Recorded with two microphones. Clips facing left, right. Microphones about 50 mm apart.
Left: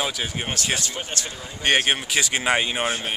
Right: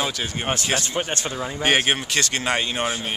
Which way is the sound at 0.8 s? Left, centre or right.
Right.